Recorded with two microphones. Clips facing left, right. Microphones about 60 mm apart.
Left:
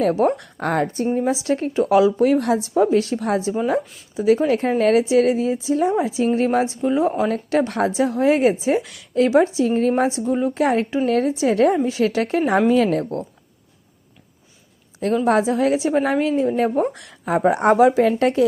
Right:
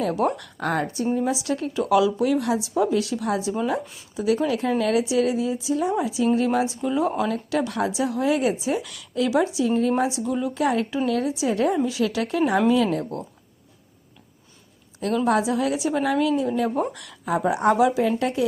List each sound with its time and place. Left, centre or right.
0.0 s speech: left
0.6 s speech: left
4.1 s speech: left
4.4 s speech: left
7.3 s speech: left
11.9 s speech: left
15.3 s speech: left
17.3 s speech: left